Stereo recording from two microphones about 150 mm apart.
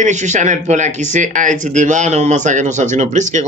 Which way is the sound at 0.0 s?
55° right (ahead or behind).